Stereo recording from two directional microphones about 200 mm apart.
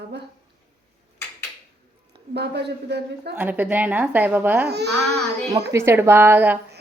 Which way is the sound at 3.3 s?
5° right (ahead or behind).